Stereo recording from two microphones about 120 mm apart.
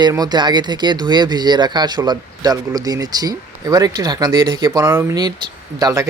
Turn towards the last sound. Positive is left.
turn(degrees=-30)  # may be behind; listen again after turning